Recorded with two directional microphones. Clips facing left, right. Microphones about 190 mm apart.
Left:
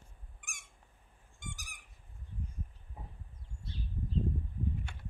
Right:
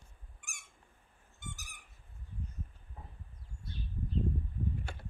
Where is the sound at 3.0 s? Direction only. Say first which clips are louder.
Left 2 dB; 15° left (ahead or behind).